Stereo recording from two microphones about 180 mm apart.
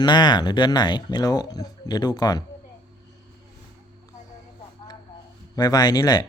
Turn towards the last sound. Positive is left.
turn(degrees=20)  # may be behind; listen again after turning